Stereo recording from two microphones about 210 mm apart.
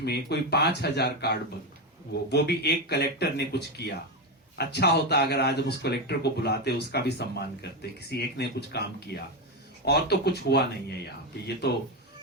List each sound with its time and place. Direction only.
0.0 s speech: 50° left (ahead or behind)